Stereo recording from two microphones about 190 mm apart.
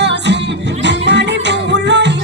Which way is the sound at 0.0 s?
65° right (ahead or behind).